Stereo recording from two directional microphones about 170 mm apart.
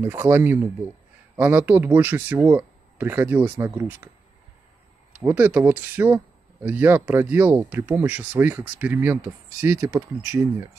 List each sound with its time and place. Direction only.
0.0 s speech: 10° right (ahead or behind)
5.1 s speech: 10° right (ahead or behind)